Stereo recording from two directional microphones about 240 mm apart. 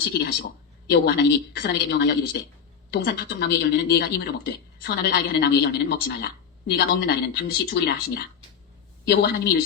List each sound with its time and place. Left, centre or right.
0.1 s a woman's voice: left